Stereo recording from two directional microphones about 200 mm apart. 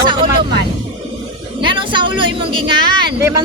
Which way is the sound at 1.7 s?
25° right (ahead or behind).